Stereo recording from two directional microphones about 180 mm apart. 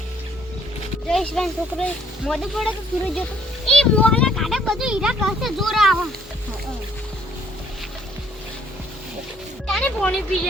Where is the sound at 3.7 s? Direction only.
5° left (ahead or behind).